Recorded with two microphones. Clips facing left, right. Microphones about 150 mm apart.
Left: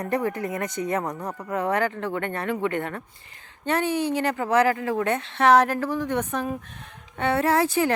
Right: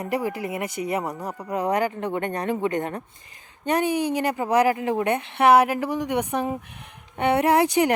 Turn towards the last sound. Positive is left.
turn(degrees=-15)  # may be behind; listen again after turning